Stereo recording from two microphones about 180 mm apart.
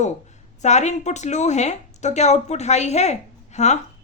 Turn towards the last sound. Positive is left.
turn(degrees=40)  # may be behind; listen again after turning